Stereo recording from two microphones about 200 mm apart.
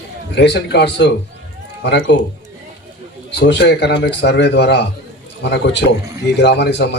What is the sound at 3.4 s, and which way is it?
Speech, 55° left (ahead or behind).